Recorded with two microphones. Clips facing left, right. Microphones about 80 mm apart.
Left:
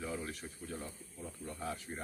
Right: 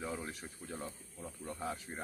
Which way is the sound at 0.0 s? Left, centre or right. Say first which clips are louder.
Even; centre.